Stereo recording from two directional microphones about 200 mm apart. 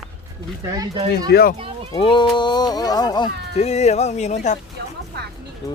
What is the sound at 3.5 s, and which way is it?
Speech, 35° left (ahead or behind).